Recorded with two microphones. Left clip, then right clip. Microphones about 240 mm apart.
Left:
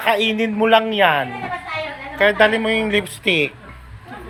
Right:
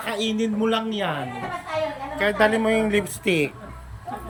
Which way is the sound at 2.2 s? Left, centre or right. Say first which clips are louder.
Left 5 dB; centre.